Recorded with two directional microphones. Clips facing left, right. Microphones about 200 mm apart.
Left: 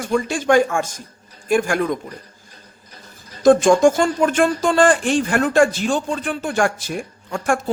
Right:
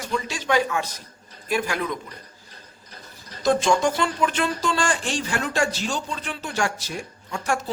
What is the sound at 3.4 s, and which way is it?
Speech, 50° left (ahead or behind).